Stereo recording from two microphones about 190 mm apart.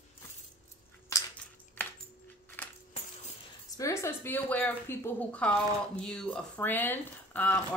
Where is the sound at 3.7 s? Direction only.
15° left (ahead or behind).